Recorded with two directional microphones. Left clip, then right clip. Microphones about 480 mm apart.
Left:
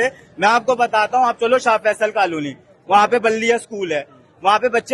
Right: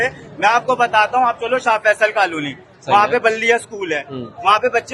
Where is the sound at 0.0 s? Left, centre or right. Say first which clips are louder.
Even; left.